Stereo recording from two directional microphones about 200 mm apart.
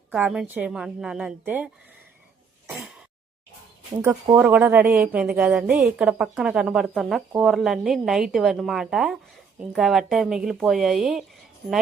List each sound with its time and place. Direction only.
0.1 s a woman's voice: 5° right (ahead or behind)
2.6 s throat clearing: centre (ahead or behind)
4.0 s a woman's voice: 10° right (ahead or behind)